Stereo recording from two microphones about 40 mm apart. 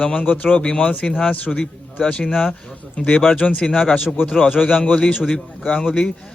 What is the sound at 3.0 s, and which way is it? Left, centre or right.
Speech, left.